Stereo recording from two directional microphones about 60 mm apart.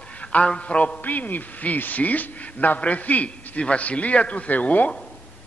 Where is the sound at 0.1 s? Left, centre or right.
Left.